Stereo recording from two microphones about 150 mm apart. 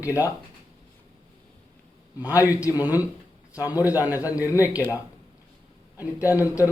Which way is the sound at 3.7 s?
15° right (ahead or behind).